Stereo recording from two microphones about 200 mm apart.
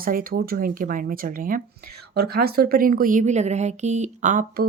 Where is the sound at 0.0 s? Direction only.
45° right (ahead or behind).